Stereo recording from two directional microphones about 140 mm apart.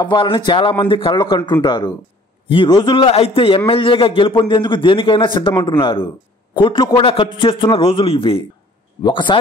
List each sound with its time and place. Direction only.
0.0 s a man's voice: 35° left (ahead or behind)